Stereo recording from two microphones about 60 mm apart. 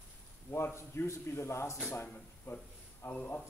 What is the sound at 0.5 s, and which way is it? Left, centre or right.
A man's voice, left.